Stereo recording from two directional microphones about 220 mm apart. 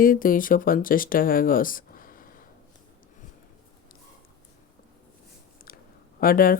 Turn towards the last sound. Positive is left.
turn(degrees=40)  # may be behind; listen again after turning